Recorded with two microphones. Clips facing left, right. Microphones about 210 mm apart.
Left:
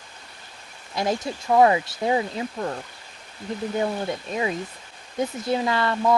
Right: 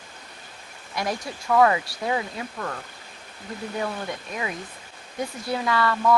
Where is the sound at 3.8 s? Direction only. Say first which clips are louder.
Left 4 dB; 25° left (ahead or behind).